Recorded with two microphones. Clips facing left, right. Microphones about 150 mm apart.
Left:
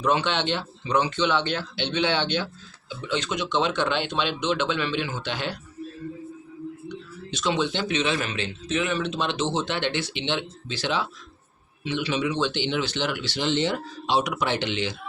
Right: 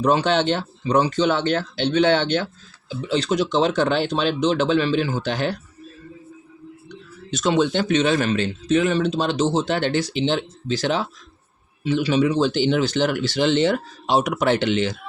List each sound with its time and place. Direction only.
0.0 s speech: 40° right (ahead or behind)
2.9 s speech: 35° right (ahead or behind)
6.8 s speech: 45° right (ahead or behind)